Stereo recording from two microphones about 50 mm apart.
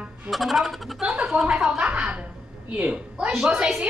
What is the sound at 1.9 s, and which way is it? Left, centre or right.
A woman's voice, right.